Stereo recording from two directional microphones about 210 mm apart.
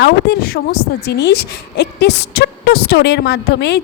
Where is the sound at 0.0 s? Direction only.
50° left (ahead or behind).